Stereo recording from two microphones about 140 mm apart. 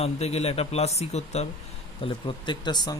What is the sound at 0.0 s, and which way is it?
Speech, 50° left (ahead or behind).